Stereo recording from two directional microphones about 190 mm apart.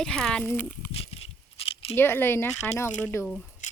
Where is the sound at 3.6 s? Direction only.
40° left (ahead or behind).